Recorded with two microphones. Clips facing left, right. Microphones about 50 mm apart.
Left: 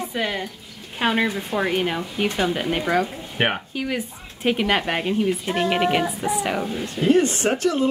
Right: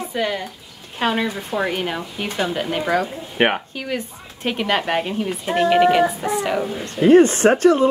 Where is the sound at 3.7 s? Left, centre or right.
Centre.